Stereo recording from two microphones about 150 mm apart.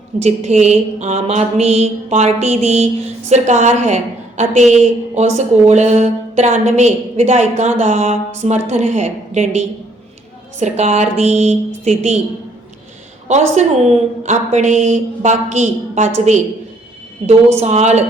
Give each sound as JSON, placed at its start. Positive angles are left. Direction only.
{"t": 0.2, "sound": "a woman's voice", "side_deg": -45}
{"t": 13.2, "sound": "a woman's voice", "side_deg": -50}